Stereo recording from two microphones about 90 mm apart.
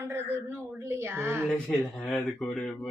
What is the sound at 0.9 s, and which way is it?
Speech, 25° right (ahead or behind).